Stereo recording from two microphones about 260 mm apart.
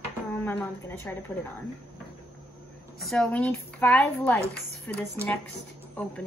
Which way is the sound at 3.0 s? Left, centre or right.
Centre.